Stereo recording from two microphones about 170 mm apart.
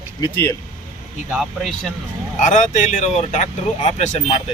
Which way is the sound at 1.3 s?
Centre (ahead or behind).